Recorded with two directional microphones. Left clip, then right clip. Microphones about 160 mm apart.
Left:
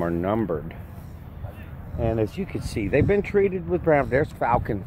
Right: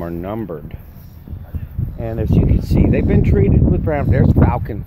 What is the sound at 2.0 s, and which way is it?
Speech, 30° right (ahead or behind).